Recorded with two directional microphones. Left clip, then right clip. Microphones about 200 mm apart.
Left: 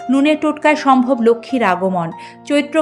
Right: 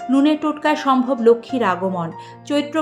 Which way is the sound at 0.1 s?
25° left (ahead or behind).